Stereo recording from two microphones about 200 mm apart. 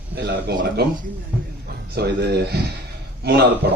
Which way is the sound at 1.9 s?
55° right (ahead or behind).